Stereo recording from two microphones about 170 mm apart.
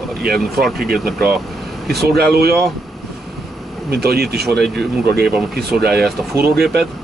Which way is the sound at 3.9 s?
70° right (ahead or behind).